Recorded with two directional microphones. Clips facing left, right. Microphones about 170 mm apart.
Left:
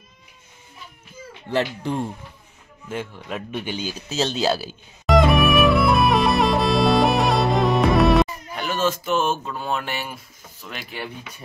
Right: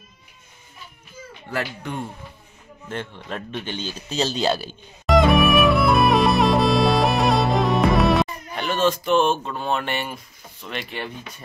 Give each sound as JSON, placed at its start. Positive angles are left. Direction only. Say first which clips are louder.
{"t": 1.5, "sound": "speech", "louder": "left 5 dB", "side_deg": 30}
{"t": 2.9, "sound": "a sound", "louder": "left 1 dB", "side_deg": 5}
{"t": 9.5, "sound": "speech", "louder": "right 2 dB", "side_deg": 5}